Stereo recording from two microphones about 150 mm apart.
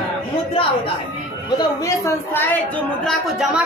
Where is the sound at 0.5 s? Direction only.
40° left (ahead or behind).